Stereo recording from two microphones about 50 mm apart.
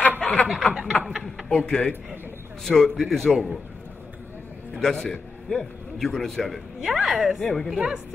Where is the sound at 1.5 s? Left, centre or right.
Left.